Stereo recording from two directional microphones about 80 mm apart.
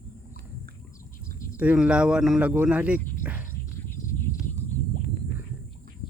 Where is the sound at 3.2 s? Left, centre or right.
Centre.